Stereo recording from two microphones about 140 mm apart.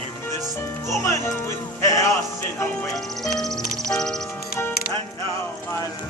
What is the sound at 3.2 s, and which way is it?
Music, centre (ahead or behind).